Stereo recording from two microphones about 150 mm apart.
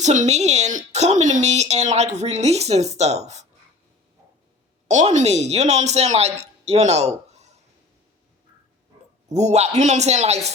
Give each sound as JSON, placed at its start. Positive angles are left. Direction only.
{"t": 0.0, "sound": "speech", "side_deg": -50}
{"t": 4.9, "sound": "speech", "side_deg": -55}
{"t": 9.3, "sound": "speech", "side_deg": -45}